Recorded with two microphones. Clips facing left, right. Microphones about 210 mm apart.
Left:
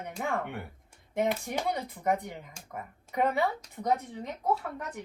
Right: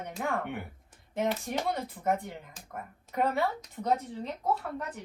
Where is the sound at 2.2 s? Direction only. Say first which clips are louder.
Left 1 dB; 15° left (ahead or behind).